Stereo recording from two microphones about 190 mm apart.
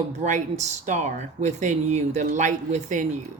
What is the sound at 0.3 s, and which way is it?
Speech, 40° right (ahead or behind).